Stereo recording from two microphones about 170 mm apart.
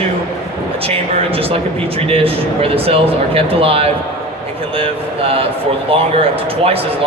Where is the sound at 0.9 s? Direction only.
35° right (ahead or behind).